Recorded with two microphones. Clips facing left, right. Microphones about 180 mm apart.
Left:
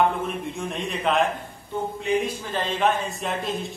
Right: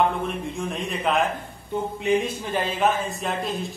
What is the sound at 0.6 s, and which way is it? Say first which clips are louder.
Speech: right 1 dB; centre (ahead or behind).